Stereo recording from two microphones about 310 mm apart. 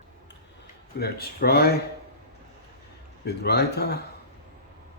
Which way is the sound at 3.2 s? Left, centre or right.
Left.